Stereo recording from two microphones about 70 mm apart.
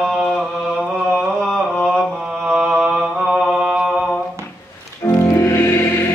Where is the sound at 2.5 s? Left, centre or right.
Centre.